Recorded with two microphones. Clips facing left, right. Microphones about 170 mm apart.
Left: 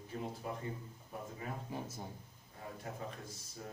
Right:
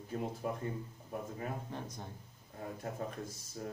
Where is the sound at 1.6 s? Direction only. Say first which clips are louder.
Even; 5° left (ahead or behind).